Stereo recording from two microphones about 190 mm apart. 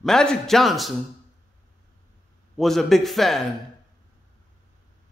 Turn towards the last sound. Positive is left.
turn(degrees=0)  # may be behind; listen again after turning